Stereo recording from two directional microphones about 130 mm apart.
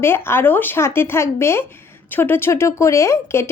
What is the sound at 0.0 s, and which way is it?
A woman's voice, 20° left (ahead or behind).